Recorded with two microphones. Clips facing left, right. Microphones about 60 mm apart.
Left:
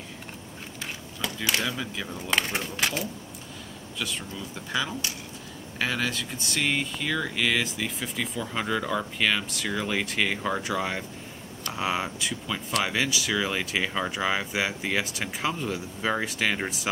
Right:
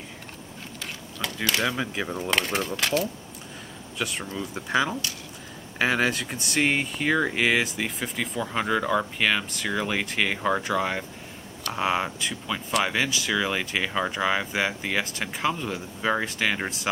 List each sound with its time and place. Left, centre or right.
1.2 s speech: centre
1.6 s speech: right
2.3 s speech: centre
4.0 s speech: right; by 16.9 s centre